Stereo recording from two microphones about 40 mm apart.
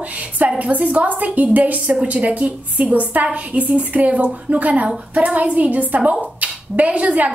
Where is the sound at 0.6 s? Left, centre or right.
Right.